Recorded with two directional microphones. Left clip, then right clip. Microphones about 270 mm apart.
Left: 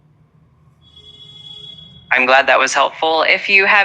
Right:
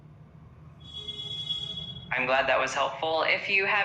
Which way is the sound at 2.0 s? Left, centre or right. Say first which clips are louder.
Left 14 dB; left.